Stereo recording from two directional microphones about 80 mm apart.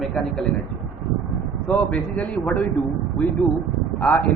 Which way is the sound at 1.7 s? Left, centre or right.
Centre.